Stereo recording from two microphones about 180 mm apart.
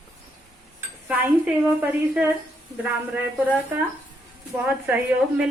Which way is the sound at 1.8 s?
10° right (ahead or behind).